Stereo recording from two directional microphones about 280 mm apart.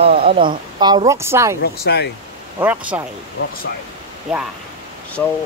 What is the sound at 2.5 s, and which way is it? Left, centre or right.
Speech, centre.